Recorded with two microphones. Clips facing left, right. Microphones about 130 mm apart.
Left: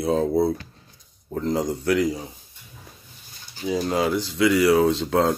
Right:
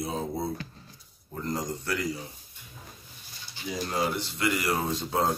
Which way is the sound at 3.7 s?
90° left.